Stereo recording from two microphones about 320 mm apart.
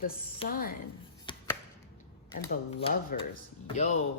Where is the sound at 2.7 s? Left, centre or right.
Left.